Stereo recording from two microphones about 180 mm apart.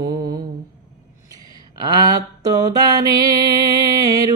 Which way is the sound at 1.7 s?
25° right (ahead or behind).